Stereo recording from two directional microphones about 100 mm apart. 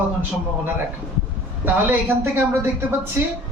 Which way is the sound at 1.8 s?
20° right (ahead or behind).